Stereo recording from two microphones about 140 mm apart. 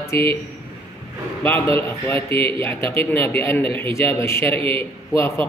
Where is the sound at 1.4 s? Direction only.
15° left (ahead or behind).